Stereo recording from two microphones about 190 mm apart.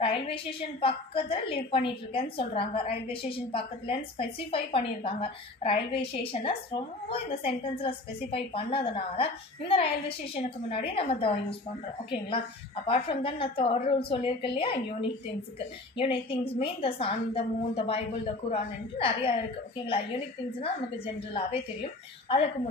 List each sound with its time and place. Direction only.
0.0 s a woman's voice: 30° left (ahead or behind)
12.8 s a woman's voice: 30° left (ahead or behind)
20.6 s a woman's voice: 30° left (ahead or behind)